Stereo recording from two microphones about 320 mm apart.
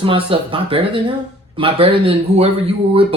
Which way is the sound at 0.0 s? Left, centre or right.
Centre.